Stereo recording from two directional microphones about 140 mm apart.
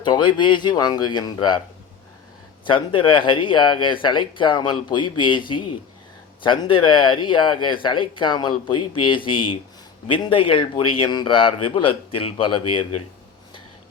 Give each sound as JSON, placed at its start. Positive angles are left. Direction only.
{"t": 0.0, "sound": "speech", "side_deg": 35}
{"t": 2.6, "sound": "speech", "side_deg": 35}